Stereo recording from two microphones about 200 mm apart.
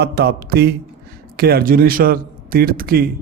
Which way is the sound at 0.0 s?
55° right (ahead or behind).